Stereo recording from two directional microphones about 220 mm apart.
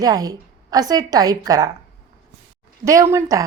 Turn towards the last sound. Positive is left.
turn(degrees=-15)  # may be behind; listen again after turning